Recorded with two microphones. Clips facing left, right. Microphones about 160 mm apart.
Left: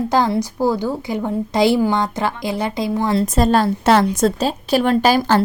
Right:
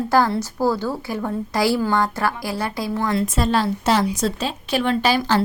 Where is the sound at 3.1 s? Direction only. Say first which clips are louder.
Left 5 dB; 40° left (ahead or behind).